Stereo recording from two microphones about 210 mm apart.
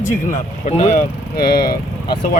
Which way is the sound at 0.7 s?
30° left (ahead or behind).